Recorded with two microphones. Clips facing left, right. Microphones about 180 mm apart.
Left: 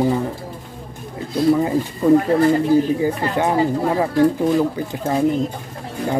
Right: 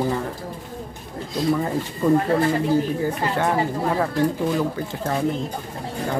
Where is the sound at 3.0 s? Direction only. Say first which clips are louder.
Left 3 dB; 15° left (ahead or behind).